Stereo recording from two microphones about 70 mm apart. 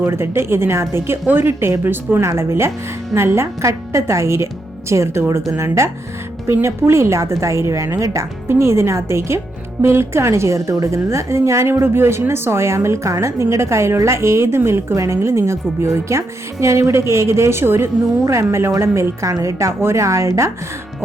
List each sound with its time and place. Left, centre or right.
0.0 s a woman's voice: right